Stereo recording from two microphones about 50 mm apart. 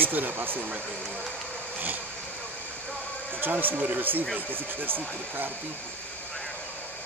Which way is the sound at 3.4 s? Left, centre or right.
Right.